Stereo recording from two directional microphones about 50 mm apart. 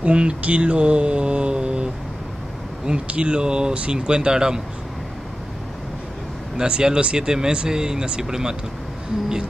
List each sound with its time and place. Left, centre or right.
0.0 s mantra: right
2.8 s speech: centre
6.5 s speech: centre